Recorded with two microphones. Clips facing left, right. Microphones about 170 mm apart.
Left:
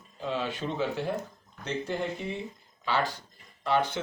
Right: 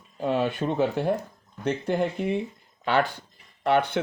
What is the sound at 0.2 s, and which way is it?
Speech, 55° right (ahead or behind).